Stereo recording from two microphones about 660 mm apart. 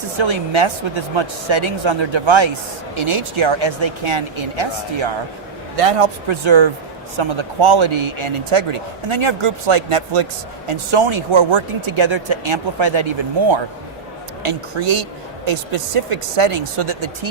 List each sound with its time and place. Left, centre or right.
0.2 s speech: right